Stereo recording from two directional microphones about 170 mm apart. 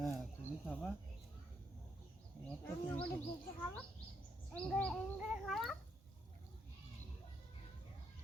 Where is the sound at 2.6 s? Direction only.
10° left (ahead or behind).